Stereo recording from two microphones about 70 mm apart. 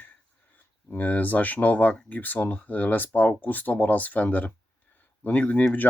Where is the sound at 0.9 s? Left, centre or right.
Left.